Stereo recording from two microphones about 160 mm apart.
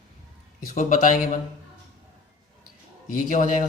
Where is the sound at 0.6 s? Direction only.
55° left (ahead or behind).